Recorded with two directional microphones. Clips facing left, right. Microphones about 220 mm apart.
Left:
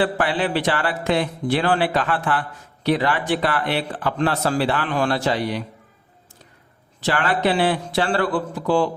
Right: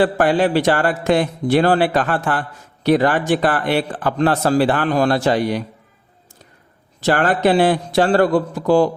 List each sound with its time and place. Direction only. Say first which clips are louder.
0.0 s a man's voice: right 6 dB; 45° right (ahead or behind)
7.0 s a man's voice: right 5 dB; 45° right (ahead or behind)